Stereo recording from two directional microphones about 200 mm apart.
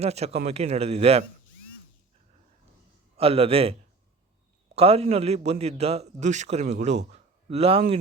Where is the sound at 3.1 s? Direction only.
30° right (ahead or behind).